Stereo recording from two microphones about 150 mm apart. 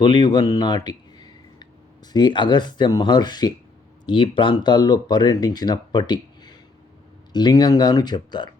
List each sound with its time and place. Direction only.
0.0 s speech: 30° left (ahead or behind)